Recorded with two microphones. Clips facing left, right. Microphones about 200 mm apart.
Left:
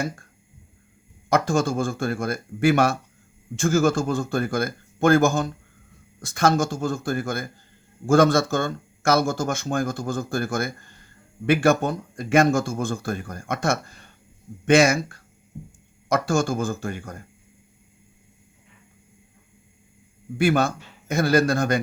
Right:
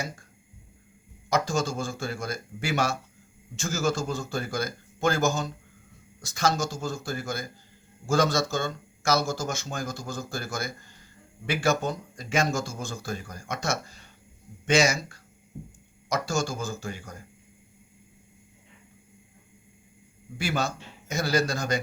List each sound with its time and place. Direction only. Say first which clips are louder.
1.3 s speech: left 5 dB; 55° left (ahead or behind)
20.4 s speech: left 9 dB; 55° left (ahead or behind)